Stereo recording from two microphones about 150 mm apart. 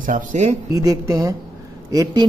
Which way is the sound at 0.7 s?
25° right (ahead or behind).